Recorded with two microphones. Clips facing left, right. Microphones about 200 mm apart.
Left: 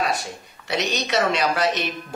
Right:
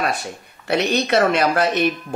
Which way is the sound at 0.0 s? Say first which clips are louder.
Right 1 dB; 55° right (ahead or behind).